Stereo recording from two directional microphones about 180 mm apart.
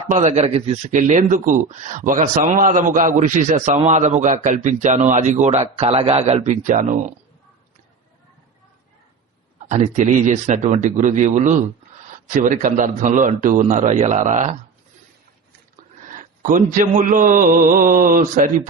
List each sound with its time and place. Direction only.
0.1 s a man's voice: 40° right (ahead or behind)
9.6 s a man's voice: 40° right (ahead or behind)
16.0 s a man's voice: 45° right (ahead or behind)